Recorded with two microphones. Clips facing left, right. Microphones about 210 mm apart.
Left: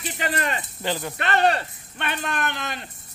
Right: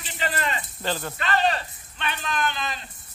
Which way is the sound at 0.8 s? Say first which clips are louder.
Left 1 dB; 15° left (ahead or behind).